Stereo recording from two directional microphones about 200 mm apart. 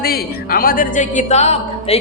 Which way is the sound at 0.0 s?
50° left (ahead or behind).